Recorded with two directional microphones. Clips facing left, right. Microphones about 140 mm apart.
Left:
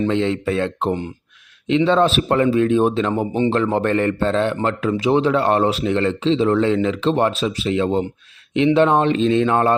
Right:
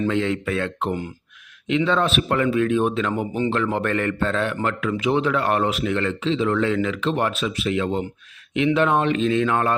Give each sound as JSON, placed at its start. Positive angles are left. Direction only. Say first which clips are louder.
{"t": 0.0, "sound": "speech", "louder": "left 3 dB", "side_deg": 25}